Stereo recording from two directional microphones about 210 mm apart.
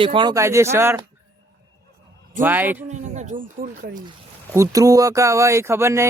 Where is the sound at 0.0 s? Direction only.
25° right (ahead or behind).